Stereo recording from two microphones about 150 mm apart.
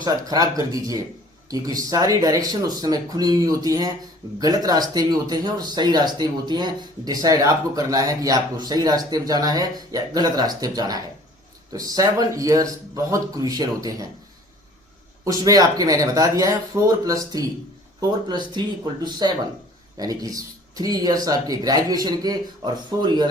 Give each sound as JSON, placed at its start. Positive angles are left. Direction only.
{"t": 0.0, "sound": "speech", "side_deg": -25}
{"t": 15.2, "sound": "speech", "side_deg": -25}